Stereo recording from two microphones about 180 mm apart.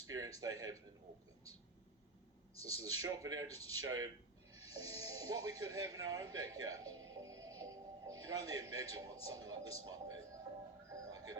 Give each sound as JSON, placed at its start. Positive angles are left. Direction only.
{"t": 0.0, "sound": "a sound", "side_deg": -20}
{"t": 0.3, "sound": "speech", "side_deg": -20}
{"t": 2.6, "sound": "speech", "side_deg": -20}
{"t": 10.8, "sound": "music", "side_deg": -20}